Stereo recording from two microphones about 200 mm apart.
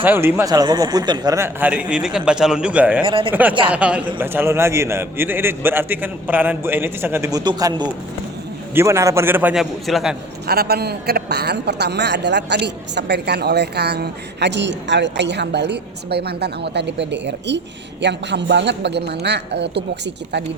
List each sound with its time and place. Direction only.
0.0 s a man's voice: 10° right (ahead or behind)
3.0 s speech: 25° right (ahead or behind)
3.7 s a man's voice: 5° right (ahead or behind)
10.4 s a woman's voice: 50° right (ahead or behind)